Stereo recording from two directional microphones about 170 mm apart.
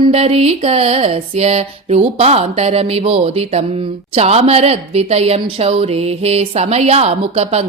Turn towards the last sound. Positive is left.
turn(degrees=-40)  # may be behind; listen again after turning